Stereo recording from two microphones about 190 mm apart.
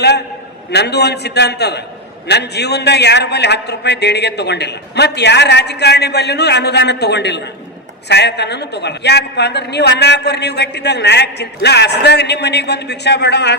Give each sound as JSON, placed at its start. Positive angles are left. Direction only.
{"t": 0.7, "sound": "a woman's voice", "side_deg": 60}